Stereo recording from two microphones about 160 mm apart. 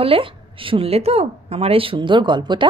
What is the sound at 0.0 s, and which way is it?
A woman's voice, 35° right (ahead or behind).